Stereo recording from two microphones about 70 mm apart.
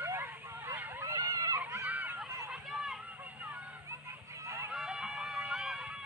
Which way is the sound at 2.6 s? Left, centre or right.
Centre.